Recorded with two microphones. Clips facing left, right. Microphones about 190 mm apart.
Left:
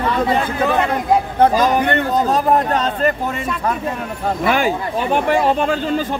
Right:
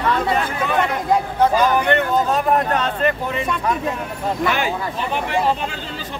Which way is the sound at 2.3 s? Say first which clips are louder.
Left 2 dB; 35° left (ahead or behind).